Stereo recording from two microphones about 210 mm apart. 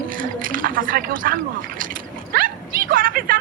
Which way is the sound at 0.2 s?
40° right (ahead or behind).